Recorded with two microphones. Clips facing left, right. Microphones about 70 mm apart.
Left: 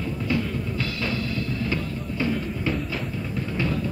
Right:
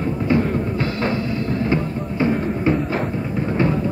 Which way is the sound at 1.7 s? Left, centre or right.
Right.